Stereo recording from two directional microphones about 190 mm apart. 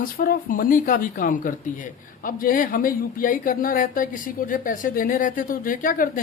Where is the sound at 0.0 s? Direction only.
50° left (ahead or behind).